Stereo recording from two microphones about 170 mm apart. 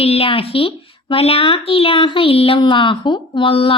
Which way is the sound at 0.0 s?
35° left (ahead or behind).